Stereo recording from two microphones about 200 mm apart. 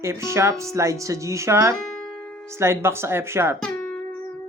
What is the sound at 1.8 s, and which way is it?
Music, centre (ahead or behind).